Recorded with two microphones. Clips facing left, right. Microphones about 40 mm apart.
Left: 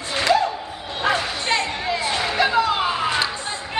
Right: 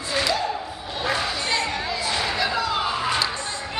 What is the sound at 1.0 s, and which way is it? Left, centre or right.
Bow-wow, left.